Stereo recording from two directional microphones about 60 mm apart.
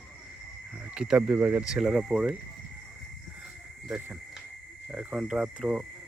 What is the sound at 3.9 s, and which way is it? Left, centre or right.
Speech, right.